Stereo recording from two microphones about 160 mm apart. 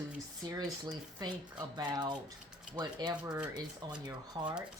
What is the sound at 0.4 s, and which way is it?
Speech, 25° right (ahead or behind).